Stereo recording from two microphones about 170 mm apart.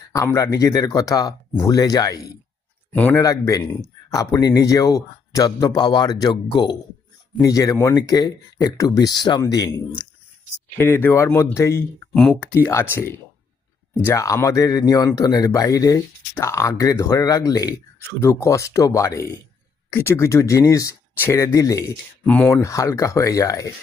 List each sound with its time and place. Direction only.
0.1 s speech: 20° left (ahead or behind)
2.9 s speech: 10° left (ahead or behind)
3.2 s speech: 20° left (ahead or behind)
10.8 s speech: 15° left (ahead or behind)
22.3 s speech: 10° left (ahead or behind)